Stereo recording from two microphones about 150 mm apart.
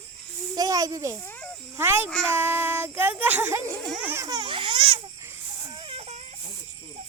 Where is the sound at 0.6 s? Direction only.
25° right (ahead or behind).